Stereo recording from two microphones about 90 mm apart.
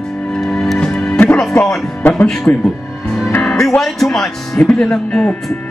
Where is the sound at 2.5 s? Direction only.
20° left (ahead or behind).